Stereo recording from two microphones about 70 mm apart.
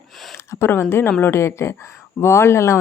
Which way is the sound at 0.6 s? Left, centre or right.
Left.